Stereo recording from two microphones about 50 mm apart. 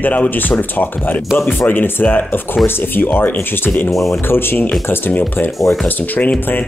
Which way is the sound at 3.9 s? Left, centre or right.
Centre.